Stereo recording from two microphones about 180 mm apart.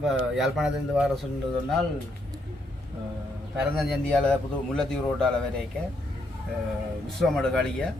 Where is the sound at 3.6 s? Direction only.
Centre (ahead or behind).